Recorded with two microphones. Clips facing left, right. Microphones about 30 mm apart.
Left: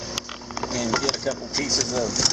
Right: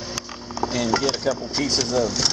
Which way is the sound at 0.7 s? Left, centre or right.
Right.